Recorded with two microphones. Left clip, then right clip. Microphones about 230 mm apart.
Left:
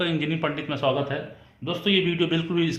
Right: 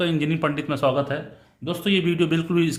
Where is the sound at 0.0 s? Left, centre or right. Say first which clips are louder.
Right 2 dB; right.